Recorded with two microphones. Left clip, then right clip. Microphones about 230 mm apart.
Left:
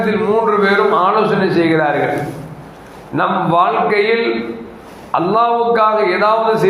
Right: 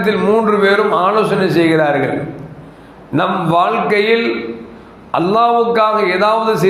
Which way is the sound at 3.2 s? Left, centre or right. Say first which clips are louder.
Even; right.